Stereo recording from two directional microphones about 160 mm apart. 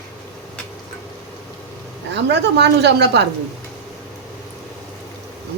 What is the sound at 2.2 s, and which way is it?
A woman's voice, 90° right.